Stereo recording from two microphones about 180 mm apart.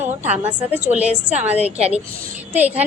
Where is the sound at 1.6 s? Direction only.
35° right (ahead or behind).